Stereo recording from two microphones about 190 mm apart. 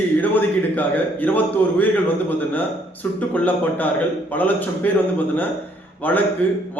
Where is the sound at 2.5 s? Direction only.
10° left (ahead or behind).